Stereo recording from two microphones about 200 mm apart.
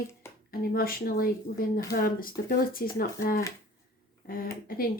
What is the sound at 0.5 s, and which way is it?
Speech, 45° left (ahead or behind).